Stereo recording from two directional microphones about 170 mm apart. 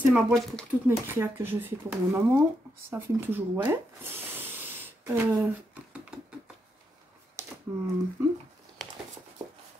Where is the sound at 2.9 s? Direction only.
15° right (ahead or behind).